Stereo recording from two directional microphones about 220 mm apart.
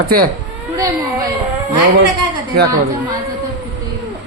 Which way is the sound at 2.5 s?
45° right (ahead or behind).